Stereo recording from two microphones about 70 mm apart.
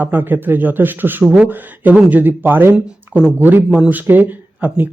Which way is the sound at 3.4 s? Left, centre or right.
Right.